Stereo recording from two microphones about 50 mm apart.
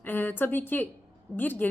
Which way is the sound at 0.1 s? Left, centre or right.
Left.